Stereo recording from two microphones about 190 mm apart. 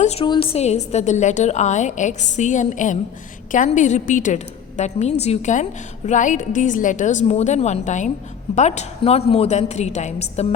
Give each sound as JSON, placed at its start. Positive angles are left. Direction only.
{"t": 0.0, "sound": "a woman's voice", "side_deg": 30}